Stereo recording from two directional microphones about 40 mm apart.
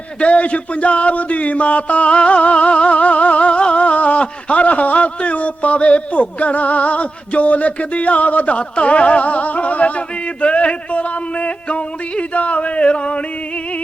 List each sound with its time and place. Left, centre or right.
0.2 s speech: left